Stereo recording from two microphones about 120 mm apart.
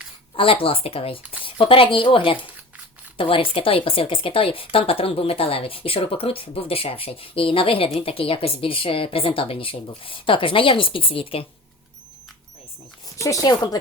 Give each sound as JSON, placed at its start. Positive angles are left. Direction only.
{"t": 0.3, "sound": "speech", "side_deg": 50}
{"t": 13.1, "sound": "speech", "side_deg": 25}